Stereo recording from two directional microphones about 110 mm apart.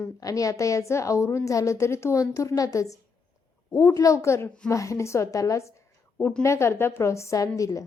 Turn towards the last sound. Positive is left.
turn(degrees=30)  # may be behind; listen again after turning